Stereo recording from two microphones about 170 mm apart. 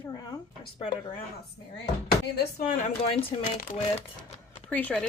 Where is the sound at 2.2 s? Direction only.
70° left (ahead or behind).